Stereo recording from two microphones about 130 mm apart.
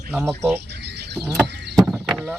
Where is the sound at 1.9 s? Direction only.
5° right (ahead or behind).